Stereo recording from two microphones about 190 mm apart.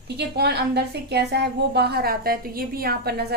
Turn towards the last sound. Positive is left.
turn(degrees=-55)  # may be behind; listen again after turning